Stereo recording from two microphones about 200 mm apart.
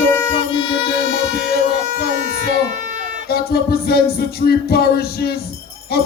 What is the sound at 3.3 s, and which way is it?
Music, 50° left (ahead or behind).